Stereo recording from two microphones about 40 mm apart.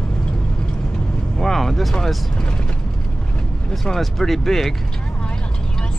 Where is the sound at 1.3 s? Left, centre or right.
Centre.